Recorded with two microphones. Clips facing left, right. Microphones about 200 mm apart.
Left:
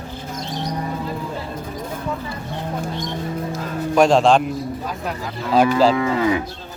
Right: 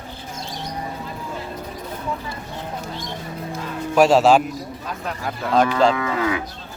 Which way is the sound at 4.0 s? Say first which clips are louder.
Even; 5° right (ahead or behind).